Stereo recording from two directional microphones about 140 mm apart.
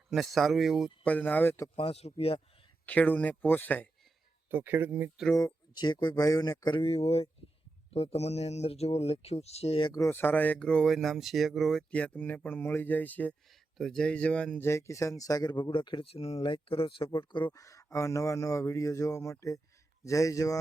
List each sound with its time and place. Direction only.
0.1 s speech: centre (ahead or behind)
1.0 s speech: 10° left (ahead or behind)
1.7 s speech: 45° left (ahead or behind)
2.8 s speech: 10° left (ahead or behind)
4.5 s speech: 15° right (ahead or behind)
5.7 s speech: 30° left (ahead or behind)
9.9 s speech: 20° left (ahead or behind); by 17.4 s 35° left (ahead or behind)
17.5 s speech: 25° left (ahead or behind)